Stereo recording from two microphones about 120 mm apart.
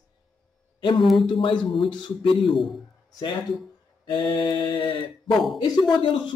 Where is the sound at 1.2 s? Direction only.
40° left (ahead or behind).